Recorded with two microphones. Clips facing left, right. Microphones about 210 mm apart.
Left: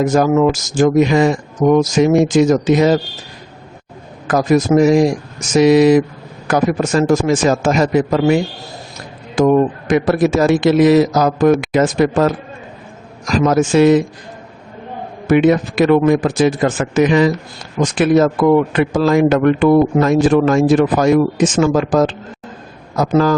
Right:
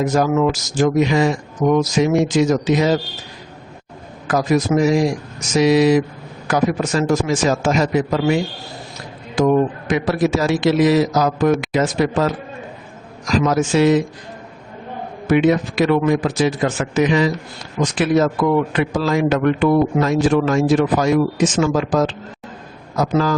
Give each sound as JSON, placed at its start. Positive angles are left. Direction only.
{"t": 0.0, "sound": "speech", "side_deg": 50}
{"t": 4.3, "sound": "speech", "side_deg": 45}
{"t": 15.3, "sound": "speech", "side_deg": 55}